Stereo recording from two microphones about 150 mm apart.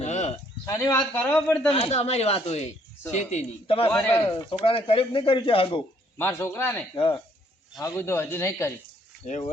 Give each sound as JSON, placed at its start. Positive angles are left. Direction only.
{"t": 0.0, "sound": "a sound", "side_deg": 50}
{"t": 0.6, "sound": "a man's voice", "side_deg": 20}
{"t": 1.7, "sound": "speech", "side_deg": 40}
{"t": 3.9, "sound": "a man's voice", "side_deg": 15}
{"t": 4.4, "sound": "speech", "side_deg": 35}
{"t": 6.1, "sound": "a man's voice", "side_deg": 15}
{"t": 6.9, "sound": "speech", "side_deg": 35}
{"t": 7.8, "sound": "a man's voice", "side_deg": 20}
{"t": 9.2, "sound": "speech", "side_deg": 45}